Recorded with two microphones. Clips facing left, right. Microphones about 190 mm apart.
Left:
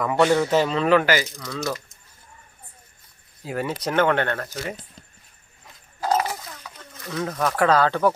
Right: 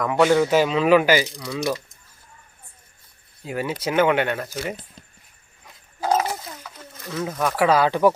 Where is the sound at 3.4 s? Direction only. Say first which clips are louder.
Right 1 dB; centre (ahead or behind).